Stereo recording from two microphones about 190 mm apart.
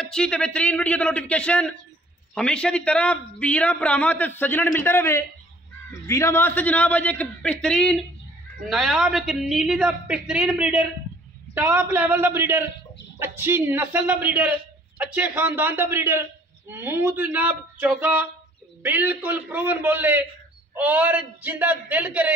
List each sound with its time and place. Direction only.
0.0 s a man's voice: 5° left (ahead or behind)